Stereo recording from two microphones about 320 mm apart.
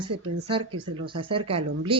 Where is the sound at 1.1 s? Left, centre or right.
Centre.